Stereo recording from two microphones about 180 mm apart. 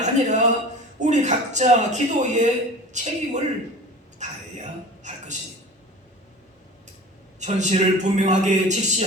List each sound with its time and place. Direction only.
0.0 s a man's voice: 40° right (ahead or behind)
7.3 s a man's voice: 40° right (ahead or behind)